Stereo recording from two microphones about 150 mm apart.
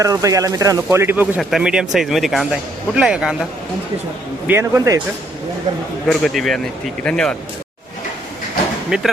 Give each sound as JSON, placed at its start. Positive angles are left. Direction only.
{"t": 0.0, "sound": "speech", "side_deg": -20}
{"t": 1.4, "sound": "speech", "side_deg": 0}
{"t": 4.4, "sound": "speech", "side_deg": -15}
{"t": 6.1, "sound": "speech", "side_deg": 0}
{"t": 8.9, "sound": "speech", "side_deg": -5}